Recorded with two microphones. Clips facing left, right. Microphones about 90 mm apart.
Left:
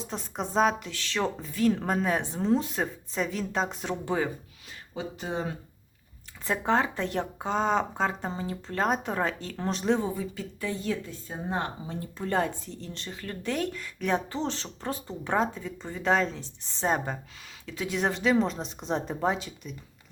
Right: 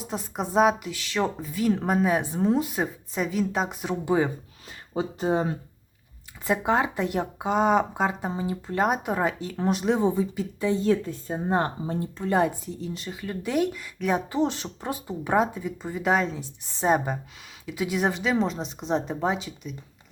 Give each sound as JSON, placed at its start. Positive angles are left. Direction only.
{"t": 0.0, "sound": "speech", "side_deg": -10}
{"t": 4.9, "sound": "speech", "side_deg": -35}
{"t": 6.4, "sound": "speech", "side_deg": -10}
{"t": 10.0, "sound": "speech", "side_deg": -20}
{"t": 10.8, "sound": "speech", "side_deg": -35}
{"t": 12.3, "sound": "speech", "side_deg": -10}